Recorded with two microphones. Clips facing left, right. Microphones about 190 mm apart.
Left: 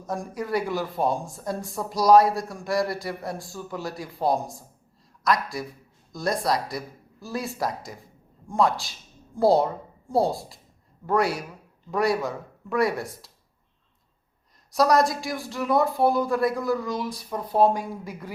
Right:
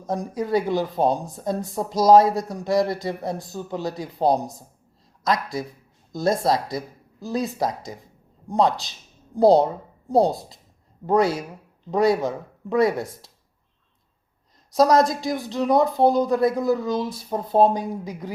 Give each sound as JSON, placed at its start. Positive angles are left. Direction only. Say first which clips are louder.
{"t": 0.1, "sound": "speech", "louder": "right 4 dB", "side_deg": -20}
{"t": 14.7, "sound": "speech", "louder": "right 3 dB", "side_deg": -20}